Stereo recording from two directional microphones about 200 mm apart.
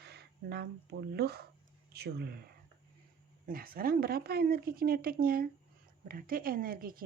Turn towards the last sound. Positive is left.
turn(degrees=-45)  # may be behind; listen again after turning